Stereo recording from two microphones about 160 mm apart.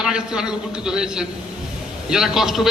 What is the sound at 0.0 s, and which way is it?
A man's voice, 5° right (ahead or behind).